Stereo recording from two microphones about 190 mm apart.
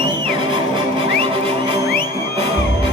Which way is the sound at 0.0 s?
30° right (ahead or behind).